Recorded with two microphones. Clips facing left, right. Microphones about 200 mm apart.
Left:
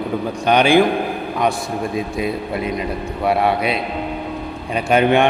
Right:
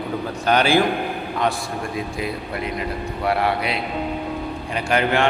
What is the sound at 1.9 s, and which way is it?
A man's voice, 20° left (ahead or behind).